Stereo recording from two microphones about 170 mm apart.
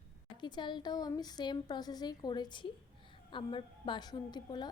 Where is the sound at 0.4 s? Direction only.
25° left (ahead or behind).